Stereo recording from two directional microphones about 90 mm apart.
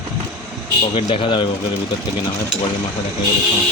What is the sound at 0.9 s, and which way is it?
Speech, 75° left (ahead or behind).